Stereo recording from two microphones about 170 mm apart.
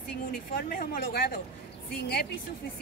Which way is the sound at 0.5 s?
55° left (ahead or behind).